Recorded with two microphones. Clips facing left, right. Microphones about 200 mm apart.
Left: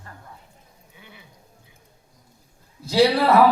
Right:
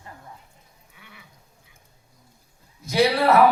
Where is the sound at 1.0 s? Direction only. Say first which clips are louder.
Left 2 dB; 25° left (ahead or behind).